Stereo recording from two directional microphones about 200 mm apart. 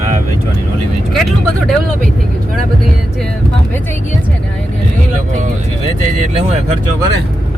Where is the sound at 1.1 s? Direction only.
Centre (ahead or behind).